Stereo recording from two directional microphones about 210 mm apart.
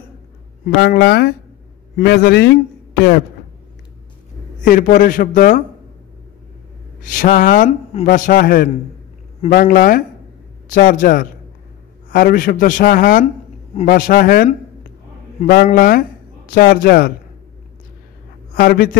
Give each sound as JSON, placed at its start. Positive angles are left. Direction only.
{"t": 0.7, "sound": "a man's voice", "side_deg": 50}
{"t": 4.6, "sound": "a man's voice", "side_deg": 40}
{"t": 7.1, "sound": "a man's voice", "side_deg": 40}
{"t": 15.5, "sound": "a man's voice", "side_deg": 45}
{"t": 18.5, "sound": "a man's voice", "side_deg": 45}